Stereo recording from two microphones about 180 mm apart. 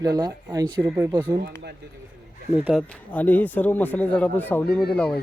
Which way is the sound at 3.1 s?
10° left (ahead or behind).